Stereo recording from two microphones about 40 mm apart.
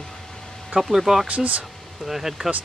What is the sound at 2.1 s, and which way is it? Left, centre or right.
Speech, centre.